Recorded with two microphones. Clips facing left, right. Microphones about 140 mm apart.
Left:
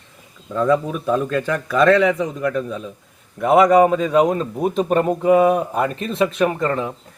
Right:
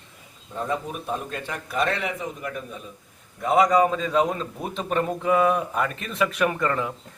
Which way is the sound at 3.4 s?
60° left (ahead or behind).